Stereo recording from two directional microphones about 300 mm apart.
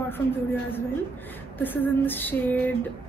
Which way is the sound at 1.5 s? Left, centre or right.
Centre.